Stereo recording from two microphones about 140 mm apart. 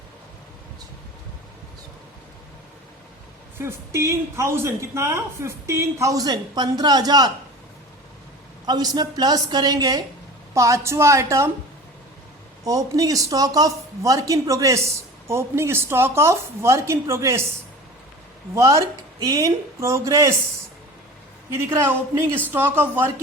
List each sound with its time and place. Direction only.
3.6 s a woman's voice: 20° right (ahead or behind)
8.6 s a woman's voice: 30° right (ahead or behind)
12.6 s a woman's voice: 25° right (ahead or behind)
18.5 s a woman's voice: 20° right (ahead or behind)
21.7 s speech: 20° right (ahead or behind)